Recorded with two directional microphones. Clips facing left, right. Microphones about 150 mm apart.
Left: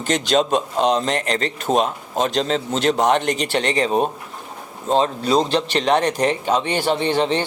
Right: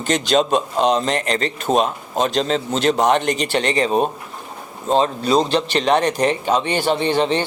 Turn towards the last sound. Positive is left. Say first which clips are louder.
# right 1 dB
turn(degrees=-10)  # may be behind; listen again after turning